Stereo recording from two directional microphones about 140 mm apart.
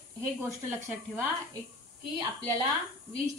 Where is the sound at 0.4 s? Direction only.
20° right (ahead or behind).